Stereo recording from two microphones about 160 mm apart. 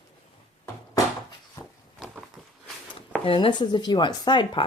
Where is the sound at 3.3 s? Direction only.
30° left (ahead or behind).